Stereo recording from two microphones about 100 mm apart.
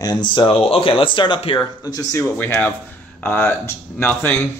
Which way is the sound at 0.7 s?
65° left (ahead or behind).